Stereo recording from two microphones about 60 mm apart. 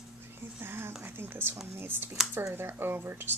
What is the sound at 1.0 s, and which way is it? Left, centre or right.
Speech, right.